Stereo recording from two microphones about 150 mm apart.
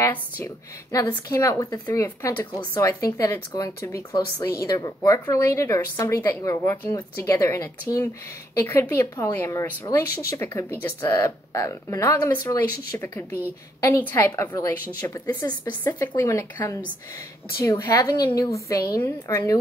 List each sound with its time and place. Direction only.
0.0 s a woman's voice: 20° left (ahead or behind)